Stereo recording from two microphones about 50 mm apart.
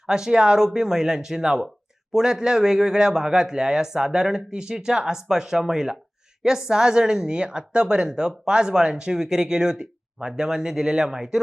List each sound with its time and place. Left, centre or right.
0.0 s speech: centre